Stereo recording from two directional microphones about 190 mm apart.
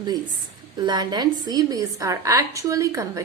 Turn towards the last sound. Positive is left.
turn(degrees=-15)  # may be behind; listen again after turning